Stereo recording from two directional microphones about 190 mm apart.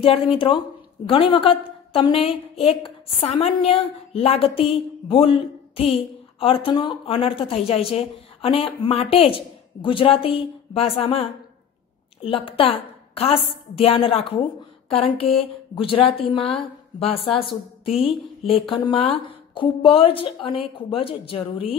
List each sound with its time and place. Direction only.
0.0 s a woman's voice: 30° left (ahead or behind)